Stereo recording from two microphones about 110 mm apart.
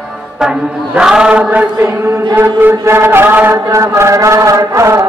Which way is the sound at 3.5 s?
30° right (ahead or behind).